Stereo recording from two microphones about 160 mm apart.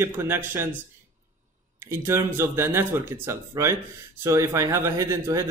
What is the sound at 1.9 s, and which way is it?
Speech, 15° right (ahead or behind).